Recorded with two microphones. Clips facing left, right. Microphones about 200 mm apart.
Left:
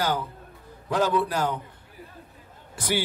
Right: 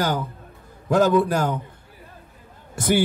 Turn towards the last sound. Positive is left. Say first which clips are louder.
# right 7 dB
turn(degrees=-50)  # may be behind; listen again after turning